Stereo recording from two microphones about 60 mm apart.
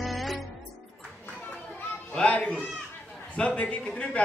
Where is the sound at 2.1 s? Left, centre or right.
Centre.